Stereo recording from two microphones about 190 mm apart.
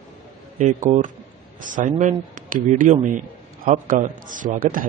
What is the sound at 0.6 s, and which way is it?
A man's voice, 40° right (ahead or behind).